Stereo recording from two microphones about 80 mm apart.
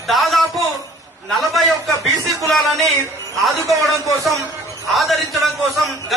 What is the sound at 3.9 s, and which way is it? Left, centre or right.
Speech, left.